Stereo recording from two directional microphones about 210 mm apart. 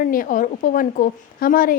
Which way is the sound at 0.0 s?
40° left (ahead or behind).